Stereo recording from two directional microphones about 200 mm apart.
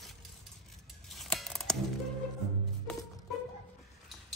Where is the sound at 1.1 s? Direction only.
Centre (ahead or behind).